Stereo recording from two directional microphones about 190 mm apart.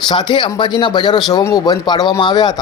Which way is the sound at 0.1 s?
25° left (ahead or behind).